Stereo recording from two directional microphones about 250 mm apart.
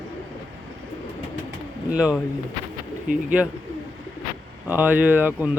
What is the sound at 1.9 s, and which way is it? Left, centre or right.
Speech, centre.